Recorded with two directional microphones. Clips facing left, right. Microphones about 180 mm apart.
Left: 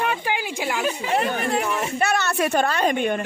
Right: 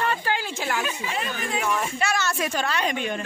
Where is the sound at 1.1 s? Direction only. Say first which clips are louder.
Left 9 dB; 60° left (ahead or behind).